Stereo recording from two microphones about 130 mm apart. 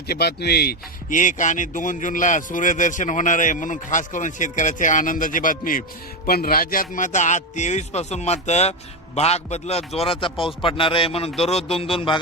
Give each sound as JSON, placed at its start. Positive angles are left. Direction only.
{"t": 1.1, "sound": "a man's voice", "side_deg": 80}